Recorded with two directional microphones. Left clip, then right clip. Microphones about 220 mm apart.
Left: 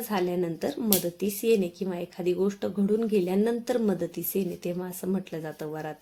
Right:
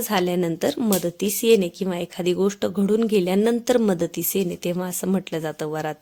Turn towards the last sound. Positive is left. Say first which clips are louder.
# right 8 dB
turn(degrees=-40)  # may be behind; listen again after turning